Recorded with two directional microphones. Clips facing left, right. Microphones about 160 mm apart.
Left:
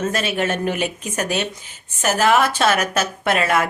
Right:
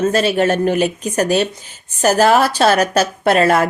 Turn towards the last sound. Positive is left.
turn(degrees=-35)  # may be behind; listen again after turning